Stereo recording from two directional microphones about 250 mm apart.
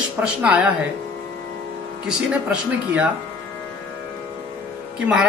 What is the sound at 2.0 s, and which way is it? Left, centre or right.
Speech, centre.